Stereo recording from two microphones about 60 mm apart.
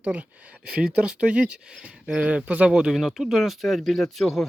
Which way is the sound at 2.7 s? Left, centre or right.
Centre.